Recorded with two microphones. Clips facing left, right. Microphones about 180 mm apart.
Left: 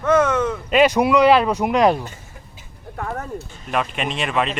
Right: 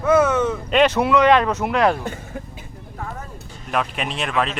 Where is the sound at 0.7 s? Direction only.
10° left (ahead or behind).